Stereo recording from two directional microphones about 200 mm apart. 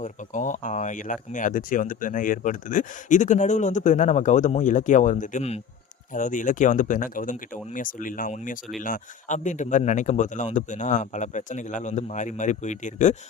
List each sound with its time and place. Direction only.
0.0 s speech: 40° left (ahead or behind)